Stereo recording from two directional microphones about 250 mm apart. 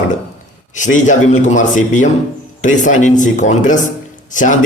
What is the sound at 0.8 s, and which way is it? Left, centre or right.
A man's voice, left.